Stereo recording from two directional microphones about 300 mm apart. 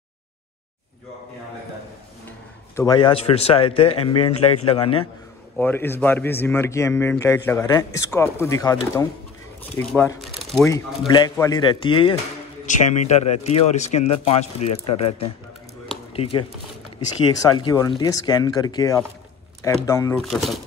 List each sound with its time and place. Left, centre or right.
2.7 s a man's voice: centre
5.6 s a man's voice: centre
11.1 s a man's voice: centre
16.1 s a man's voice: centre